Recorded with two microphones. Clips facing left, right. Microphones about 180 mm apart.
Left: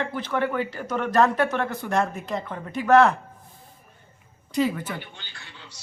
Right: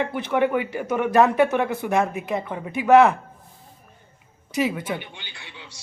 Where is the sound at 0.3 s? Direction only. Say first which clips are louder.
Right 5 dB; 15° right (ahead or behind).